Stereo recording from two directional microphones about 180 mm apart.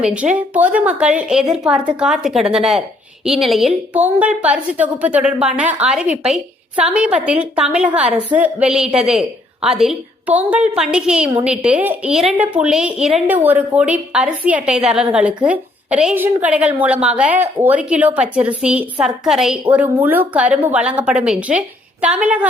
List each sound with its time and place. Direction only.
0.0 s a woman's voice: 5° right (ahead or behind)